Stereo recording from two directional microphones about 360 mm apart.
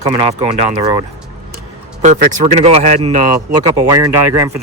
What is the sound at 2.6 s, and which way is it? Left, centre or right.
Speech, centre.